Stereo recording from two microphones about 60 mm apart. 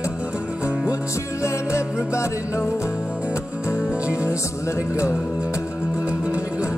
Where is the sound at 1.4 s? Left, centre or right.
Left.